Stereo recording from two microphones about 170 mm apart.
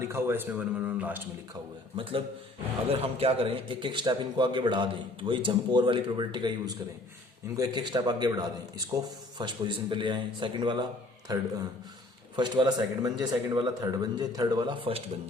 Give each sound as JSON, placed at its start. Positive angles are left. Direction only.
{"t": 0.0, "sound": "speech", "side_deg": -15}
{"t": 2.0, "sound": "a man's voice", "side_deg": -30}